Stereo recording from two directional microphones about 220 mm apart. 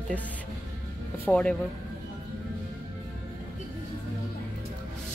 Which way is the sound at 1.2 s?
5° left (ahead or behind).